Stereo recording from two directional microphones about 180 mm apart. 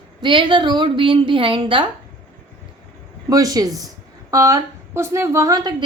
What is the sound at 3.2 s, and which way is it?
A woman's voice, 20° right (ahead or behind).